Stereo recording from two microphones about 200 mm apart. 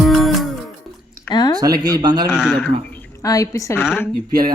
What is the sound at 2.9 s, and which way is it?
Speech, 15° left (ahead or behind).